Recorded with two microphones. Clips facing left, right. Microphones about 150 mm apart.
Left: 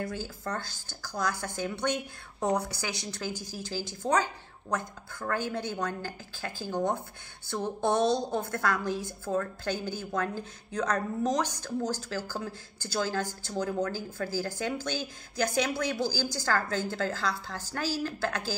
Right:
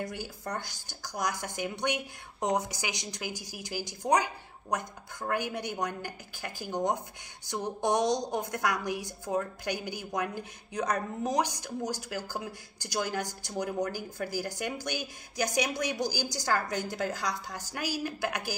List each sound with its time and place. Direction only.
0.0 s a woman's voice: 15° right (ahead or behind)